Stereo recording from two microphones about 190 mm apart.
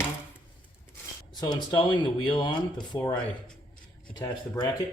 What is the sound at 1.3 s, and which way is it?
Speech, 20° left (ahead or behind).